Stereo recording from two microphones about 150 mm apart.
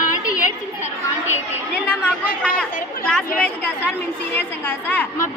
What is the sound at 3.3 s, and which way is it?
A woman's voice, 10° left (ahead or behind).